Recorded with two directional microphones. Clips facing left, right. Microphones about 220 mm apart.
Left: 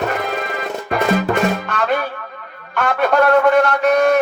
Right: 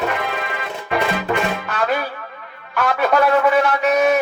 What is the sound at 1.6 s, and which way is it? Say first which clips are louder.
A man's voice: left 2 dB; 5° right (ahead or behind).